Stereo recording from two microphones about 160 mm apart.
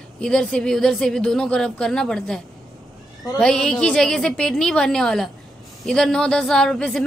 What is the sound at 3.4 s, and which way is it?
A woman's voice, 5° left (ahead or behind).